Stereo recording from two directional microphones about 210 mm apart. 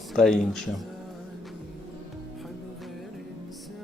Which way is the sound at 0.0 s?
Centre (ahead or behind).